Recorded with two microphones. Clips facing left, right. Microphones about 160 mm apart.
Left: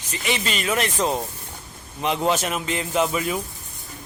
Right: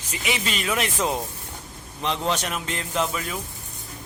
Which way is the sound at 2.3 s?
5° left (ahead or behind).